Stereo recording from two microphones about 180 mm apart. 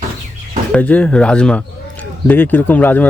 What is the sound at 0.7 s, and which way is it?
Speech, 10° left (ahead or behind).